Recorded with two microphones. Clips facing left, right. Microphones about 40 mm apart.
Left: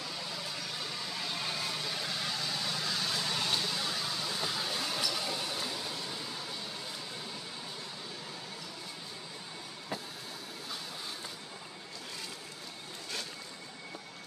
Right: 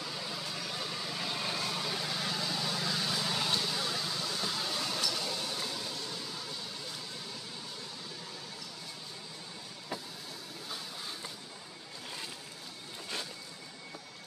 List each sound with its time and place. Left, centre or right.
0.0 s vehicle: centre